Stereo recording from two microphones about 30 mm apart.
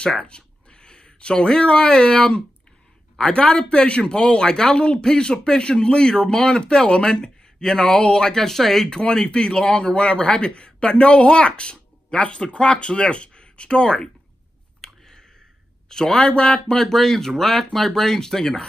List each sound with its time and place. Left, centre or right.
0.3 s speech: left; by 8.8 s centre
9.0 s speech: left
14.8 s a sound: centre
15.9 s speech: left
16.9 s speech: centre